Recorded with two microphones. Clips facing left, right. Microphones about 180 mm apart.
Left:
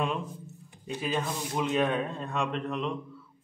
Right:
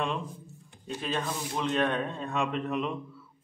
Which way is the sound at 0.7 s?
5° left (ahead or behind).